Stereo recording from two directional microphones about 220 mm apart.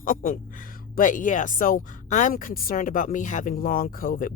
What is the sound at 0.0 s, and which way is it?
A woman's voice, 40° left (ahead or behind).